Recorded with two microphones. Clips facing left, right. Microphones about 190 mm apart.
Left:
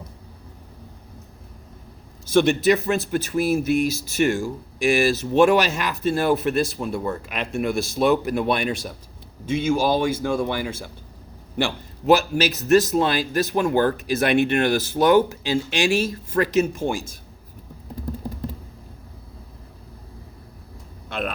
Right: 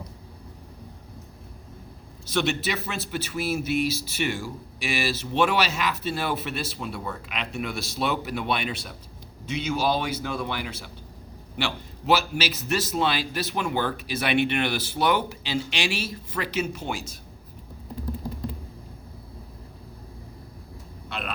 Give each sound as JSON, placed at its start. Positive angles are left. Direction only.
{"t": 2.2, "sound": "speech", "side_deg": 50}